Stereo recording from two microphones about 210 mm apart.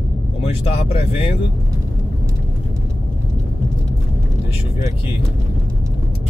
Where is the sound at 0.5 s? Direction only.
25° left (ahead or behind).